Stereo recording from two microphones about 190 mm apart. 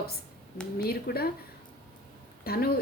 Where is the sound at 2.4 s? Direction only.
55° left (ahead or behind).